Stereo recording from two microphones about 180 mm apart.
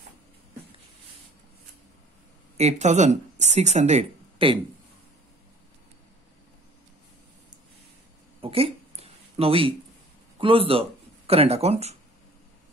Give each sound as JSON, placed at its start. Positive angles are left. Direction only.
{"t": 2.5, "sound": "speech", "side_deg": -40}
{"t": 8.4, "sound": "a sound", "side_deg": -30}
{"t": 10.4, "sound": "speech", "side_deg": -30}